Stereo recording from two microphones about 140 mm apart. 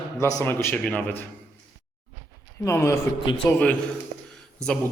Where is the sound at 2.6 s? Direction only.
20° left (ahead or behind).